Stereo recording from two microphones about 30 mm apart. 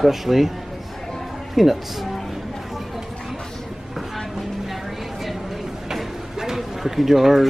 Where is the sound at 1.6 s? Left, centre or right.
Centre.